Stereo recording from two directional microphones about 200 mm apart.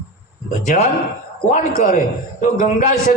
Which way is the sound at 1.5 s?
40° left (ahead or behind).